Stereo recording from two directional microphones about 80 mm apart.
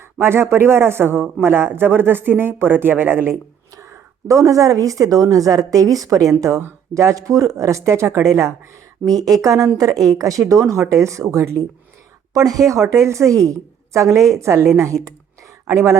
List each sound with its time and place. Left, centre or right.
0.2 s speech: right
3.8 s speech: right
9.0 s a woman's voice: right
14.9 s speech: centre
15.7 s a woman's voice: right